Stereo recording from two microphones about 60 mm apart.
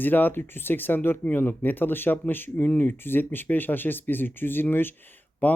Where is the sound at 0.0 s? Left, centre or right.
Left.